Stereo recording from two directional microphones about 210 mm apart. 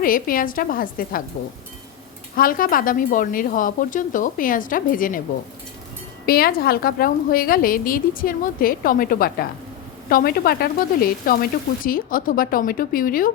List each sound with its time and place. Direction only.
0.0 s speech: 40° left (ahead or behind)
2.3 s speech: 40° left (ahead or behind)
6.2 s a woman's voice: 45° left (ahead or behind)